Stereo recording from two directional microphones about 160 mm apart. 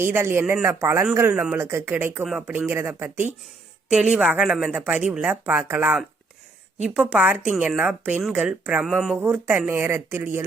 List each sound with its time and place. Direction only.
0.0 s speech: 15° right (ahead or behind)